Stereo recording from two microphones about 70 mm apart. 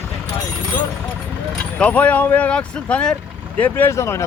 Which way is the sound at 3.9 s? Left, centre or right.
Left.